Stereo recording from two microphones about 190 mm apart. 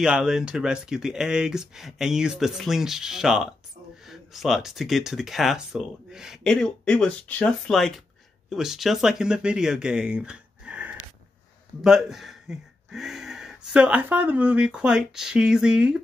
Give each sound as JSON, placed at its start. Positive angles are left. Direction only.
{"t": 0.0, "sound": "speech", "side_deg": -5}